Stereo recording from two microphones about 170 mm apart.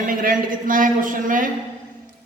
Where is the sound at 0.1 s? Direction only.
55° right (ahead or behind).